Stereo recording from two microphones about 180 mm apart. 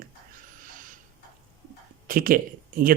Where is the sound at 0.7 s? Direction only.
50° right (ahead or behind).